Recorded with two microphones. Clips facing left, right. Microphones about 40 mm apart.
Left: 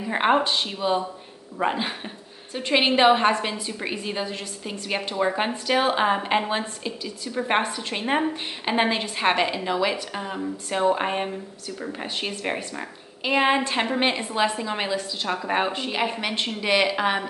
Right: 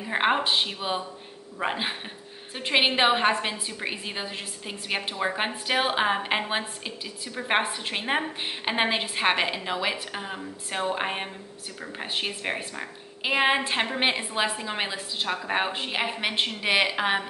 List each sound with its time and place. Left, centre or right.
0.0 s speech: centre
0.4 s a woman's voice: centre
7.6 s a woman's voice: centre
15.7 s a woman's voice: centre